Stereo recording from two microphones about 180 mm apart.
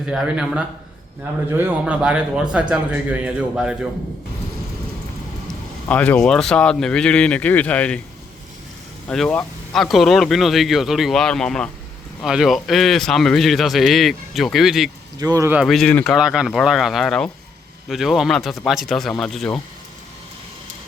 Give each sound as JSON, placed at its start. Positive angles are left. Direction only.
{"t": 0.0, "sound": "a man's voice", "side_deg": -5}
{"t": 5.5, "sound": "speech", "side_deg": 10}
{"t": 9.0, "sound": "a man's voice", "side_deg": 5}
{"t": 15.2, "sound": "speech", "side_deg": -20}
{"t": 15.5, "sound": "a man's voice", "side_deg": 0}